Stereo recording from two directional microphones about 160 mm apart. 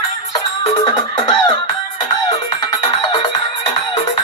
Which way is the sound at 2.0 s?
45° left (ahead or behind).